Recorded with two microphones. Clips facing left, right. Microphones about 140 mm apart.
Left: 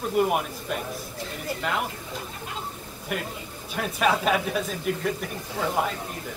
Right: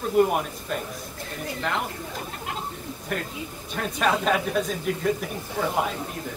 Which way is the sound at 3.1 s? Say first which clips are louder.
Even; 10° left (ahead or behind).